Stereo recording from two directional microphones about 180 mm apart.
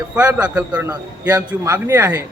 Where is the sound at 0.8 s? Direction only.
20° right (ahead or behind).